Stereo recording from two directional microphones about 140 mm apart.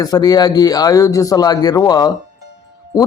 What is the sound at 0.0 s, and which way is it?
A man's voice, 30° left (ahead or behind).